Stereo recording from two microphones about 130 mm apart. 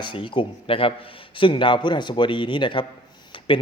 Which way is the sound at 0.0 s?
40° left (ahead or behind).